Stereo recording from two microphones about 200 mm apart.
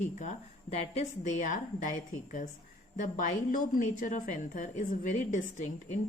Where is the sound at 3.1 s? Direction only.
40° left (ahead or behind).